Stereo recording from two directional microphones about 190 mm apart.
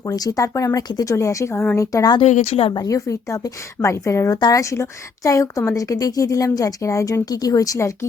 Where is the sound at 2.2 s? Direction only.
35° left (ahead or behind); by 7.9 s 20° left (ahead or behind).